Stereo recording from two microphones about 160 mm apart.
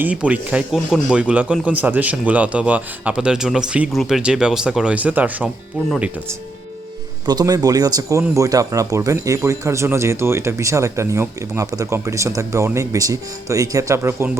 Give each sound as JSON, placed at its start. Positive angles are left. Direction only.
{"t": 0.0, "sound": "speech", "side_deg": -10}
{"t": 7.3, "sound": "speech", "side_deg": -25}